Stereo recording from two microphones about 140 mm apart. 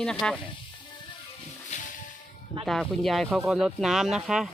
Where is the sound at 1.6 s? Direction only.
60° left (ahead or behind).